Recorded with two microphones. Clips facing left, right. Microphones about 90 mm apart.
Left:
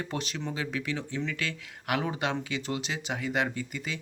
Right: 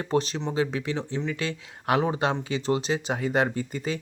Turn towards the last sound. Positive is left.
turn(degrees=-35)  # may be behind; listen again after turning